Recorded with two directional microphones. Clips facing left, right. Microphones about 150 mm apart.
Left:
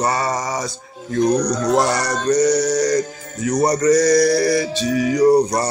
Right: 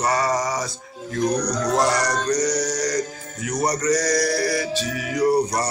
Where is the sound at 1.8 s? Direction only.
30° left (ahead or behind).